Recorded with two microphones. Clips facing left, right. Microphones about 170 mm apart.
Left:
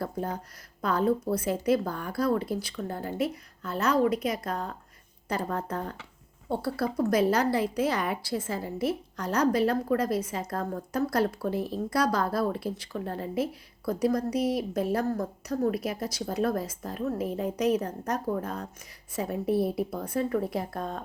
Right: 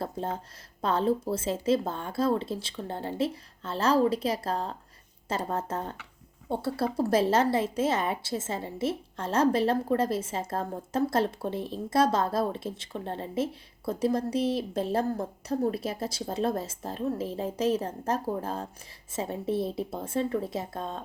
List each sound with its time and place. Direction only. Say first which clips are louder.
0.0 s a woman's voice: even; 25° right (ahead or behind)